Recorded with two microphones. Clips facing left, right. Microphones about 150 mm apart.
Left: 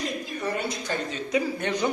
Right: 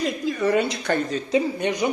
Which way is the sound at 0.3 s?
90° right.